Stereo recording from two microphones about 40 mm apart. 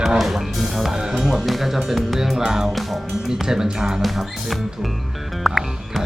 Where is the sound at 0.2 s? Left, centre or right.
Centre.